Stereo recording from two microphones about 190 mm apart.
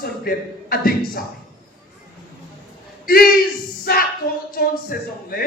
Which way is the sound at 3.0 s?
50° left (ahead or behind).